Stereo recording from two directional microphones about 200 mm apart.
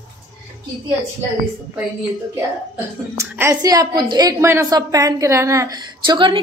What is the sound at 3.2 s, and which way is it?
A woman's voice, 15° right (ahead or behind).